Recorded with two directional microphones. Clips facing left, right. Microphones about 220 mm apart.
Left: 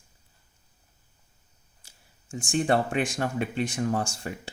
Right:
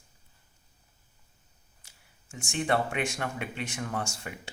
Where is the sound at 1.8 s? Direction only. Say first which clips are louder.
Left 9 dB; 30° left (ahead or behind).